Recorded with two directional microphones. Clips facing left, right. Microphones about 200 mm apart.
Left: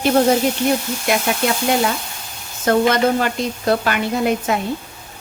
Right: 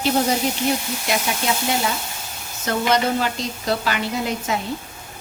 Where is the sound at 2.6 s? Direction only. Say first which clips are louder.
Left 5 dB; 55° left (ahead or behind).